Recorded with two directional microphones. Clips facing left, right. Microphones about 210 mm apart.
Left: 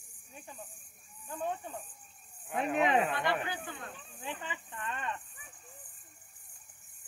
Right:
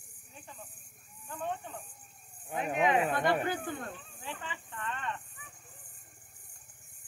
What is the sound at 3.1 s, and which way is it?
Speech, 45° right (ahead or behind).